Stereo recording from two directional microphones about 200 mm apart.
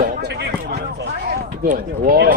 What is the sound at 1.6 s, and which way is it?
Speech, 45° right (ahead or behind).